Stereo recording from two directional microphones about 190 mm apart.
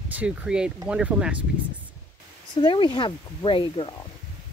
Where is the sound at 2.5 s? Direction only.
25° left (ahead or behind).